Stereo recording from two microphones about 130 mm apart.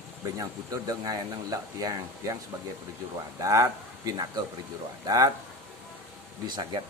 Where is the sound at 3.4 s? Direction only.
25° right (ahead or behind).